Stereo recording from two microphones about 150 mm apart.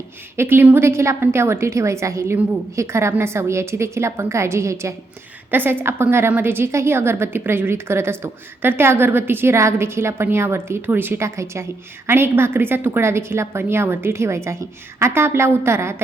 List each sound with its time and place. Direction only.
0.3 s a woman's voice: 15° right (ahead or behind)